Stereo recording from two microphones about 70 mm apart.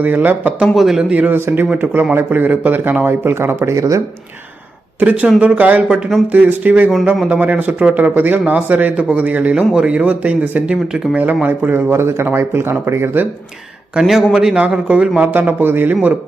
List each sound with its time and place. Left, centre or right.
0.0 s a man's voice: right
0.6 s speech: centre
1.1 s a man's voice: right
1.4 s a man's voice: right
3.8 s speech: right
4.9 s a man's voice: right
14.0 s a man's voice: centre; by 16.1 s right